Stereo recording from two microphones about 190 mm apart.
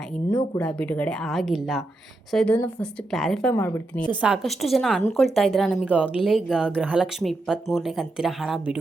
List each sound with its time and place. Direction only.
0.3 s a woman's voice: 15° left (ahead or behind)
4.1 s speech: 5° right (ahead or behind)